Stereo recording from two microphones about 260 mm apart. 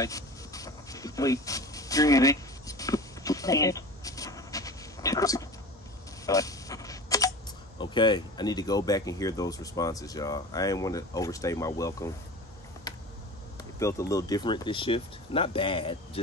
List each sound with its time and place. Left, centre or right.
0.0 s dog: centre
6.2 s a sound: centre
7.8 s speech: centre
13.7 s speech: centre